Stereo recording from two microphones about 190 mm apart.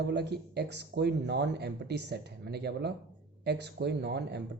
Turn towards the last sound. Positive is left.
turn(degrees=-65)  # may be behind; listen again after turning